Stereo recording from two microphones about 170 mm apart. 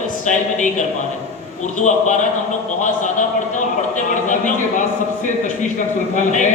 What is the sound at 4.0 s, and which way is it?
Speech, 50° left (ahead or behind).